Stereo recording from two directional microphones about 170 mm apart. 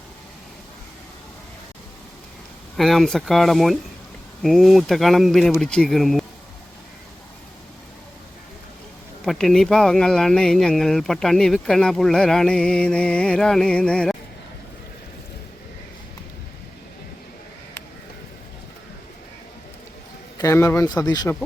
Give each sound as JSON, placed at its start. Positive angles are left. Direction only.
{"t": 2.7, "sound": "speech", "side_deg": 0}
{"t": 9.2, "sound": "speech", "side_deg": 0}
{"t": 20.4, "sound": "speech", "side_deg": 15}